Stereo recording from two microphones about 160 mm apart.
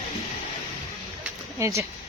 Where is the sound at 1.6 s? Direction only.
20° right (ahead or behind).